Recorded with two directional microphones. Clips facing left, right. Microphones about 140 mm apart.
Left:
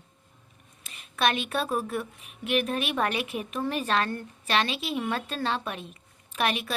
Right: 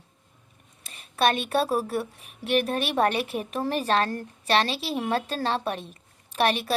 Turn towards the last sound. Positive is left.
turn(degrees=-35)  # may be behind; listen again after turning